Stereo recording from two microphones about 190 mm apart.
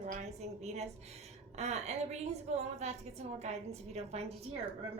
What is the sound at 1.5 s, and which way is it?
A woman's voice, 35° right (ahead or behind).